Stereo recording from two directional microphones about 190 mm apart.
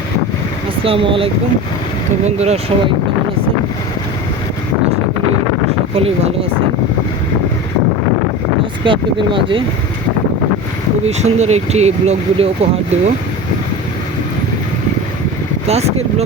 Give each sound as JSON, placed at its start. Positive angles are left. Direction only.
{"t": 0.9, "sound": "speech", "side_deg": -30}
{"t": 5.9, "sound": "speech", "side_deg": -30}
{"t": 8.8, "sound": "speech", "side_deg": -25}
{"t": 11.0, "sound": "speech", "side_deg": -35}
{"t": 15.6, "sound": "speech", "side_deg": -35}